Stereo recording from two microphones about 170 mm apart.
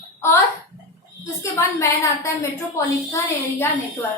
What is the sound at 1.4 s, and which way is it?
Speech, 15° left (ahead or behind).